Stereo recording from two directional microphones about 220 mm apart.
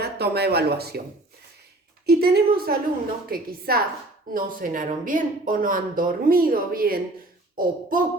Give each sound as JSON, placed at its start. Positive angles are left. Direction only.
{"t": 0.0, "sound": "speech", "side_deg": -45}
{"t": 2.0, "sound": "a woman's voice", "side_deg": -45}
{"t": 7.5, "sound": "a sound", "side_deg": -40}